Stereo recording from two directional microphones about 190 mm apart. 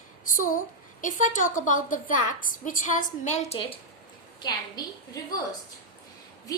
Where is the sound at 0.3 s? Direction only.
45° left (ahead or behind); by 5.4 s 20° left (ahead or behind).